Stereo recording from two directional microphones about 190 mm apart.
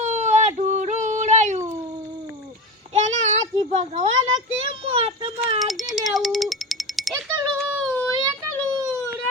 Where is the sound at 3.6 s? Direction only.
35° right (ahead or behind).